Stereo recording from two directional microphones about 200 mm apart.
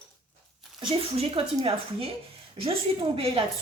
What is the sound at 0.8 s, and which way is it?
A woman's voice, 25° right (ahead or behind).